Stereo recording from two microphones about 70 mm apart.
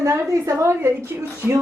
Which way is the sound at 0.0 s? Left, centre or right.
Right.